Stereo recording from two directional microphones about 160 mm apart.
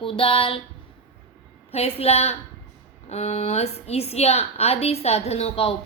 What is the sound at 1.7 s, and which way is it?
A woman's voice, 40° left (ahead or behind).